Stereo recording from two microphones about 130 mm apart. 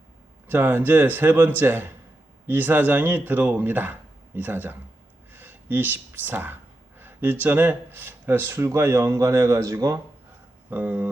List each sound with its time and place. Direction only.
0.4 s a man's voice: 15° right (ahead or behind)
10.7 s a man's voice: 15° right (ahead or behind)